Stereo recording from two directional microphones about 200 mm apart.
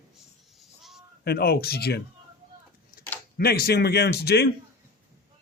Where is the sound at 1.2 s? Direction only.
50° left (ahead or behind).